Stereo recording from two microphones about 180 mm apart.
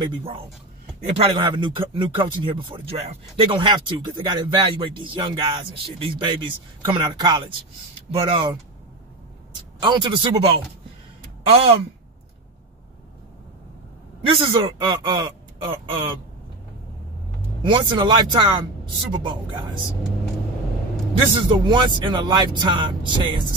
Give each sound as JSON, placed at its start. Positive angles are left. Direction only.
{"t": 0.0, "sound": "speech", "side_deg": -30}
{"t": 9.8, "sound": "speech", "side_deg": -25}
{"t": 14.2, "sound": "speech", "side_deg": -25}
{"t": 17.6, "sound": "speech", "side_deg": -25}
{"t": 21.4, "sound": "speech", "side_deg": -25}